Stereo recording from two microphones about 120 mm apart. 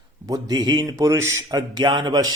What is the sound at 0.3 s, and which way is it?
Speech, 30° right (ahead or behind).